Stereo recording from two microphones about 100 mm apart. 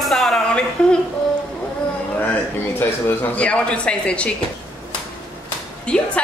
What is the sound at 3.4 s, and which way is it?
Speech, 10° left (ahead or behind).